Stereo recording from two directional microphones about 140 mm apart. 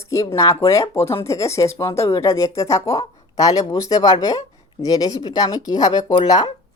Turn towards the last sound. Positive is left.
turn(degrees=30)  # may be behind; listen again after turning